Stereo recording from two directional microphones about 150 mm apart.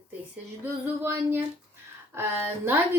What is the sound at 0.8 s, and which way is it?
A woman's voice, 15° right (ahead or behind).